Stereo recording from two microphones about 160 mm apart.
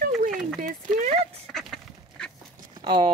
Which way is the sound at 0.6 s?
50° right (ahead or behind).